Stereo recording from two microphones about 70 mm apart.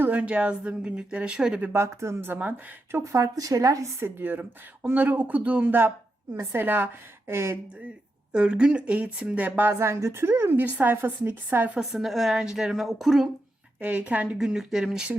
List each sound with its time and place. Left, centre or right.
0.0 s speech: centre
1.7 s a woman's voice: right
2.3 s speech: right
3.0 s speech: right
4.0 s a woman's voice: right
8.3 s speech: centre
9.7 s a woman's voice: right
11.8 s a woman's voice: centre
13.7 s speech: centre
14.3 s a woman's voice: centre